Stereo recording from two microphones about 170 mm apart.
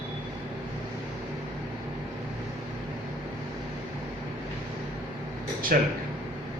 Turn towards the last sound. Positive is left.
turn(degrees=-60)  # may be behind; listen again after turning